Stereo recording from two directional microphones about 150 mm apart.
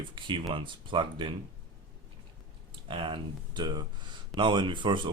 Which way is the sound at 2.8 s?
35° right (ahead or behind).